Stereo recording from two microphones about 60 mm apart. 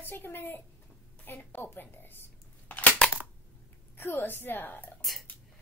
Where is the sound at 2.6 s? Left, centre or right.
Left.